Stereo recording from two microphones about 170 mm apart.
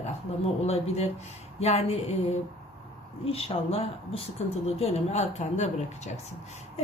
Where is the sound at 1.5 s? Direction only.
40° left (ahead or behind).